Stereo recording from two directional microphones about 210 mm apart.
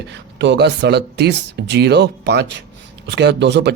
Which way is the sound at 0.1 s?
55° right (ahead or behind).